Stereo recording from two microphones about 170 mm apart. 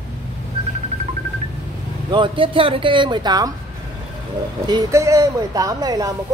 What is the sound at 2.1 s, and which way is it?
Speech, 30° right (ahead or behind).